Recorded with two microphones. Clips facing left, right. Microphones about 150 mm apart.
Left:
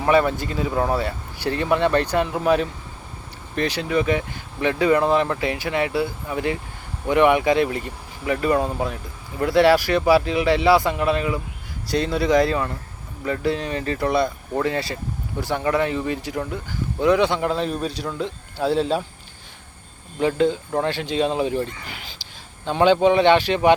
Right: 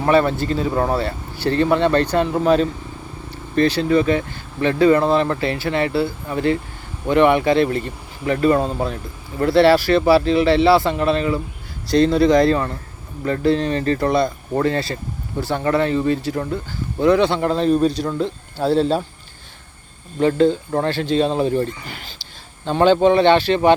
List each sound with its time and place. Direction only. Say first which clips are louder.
0.0 s speech: right 2 dB; 10° left (ahead or behind)
0.7 s speech: even; centre (ahead or behind)
0.9 s speech: right 2 dB; 15° left (ahead or behind)
17.6 s a man's voice: right 8 dB; 35° right (ahead or behind)
20.1 s speech: right 4 dB; 10° left (ahead or behind)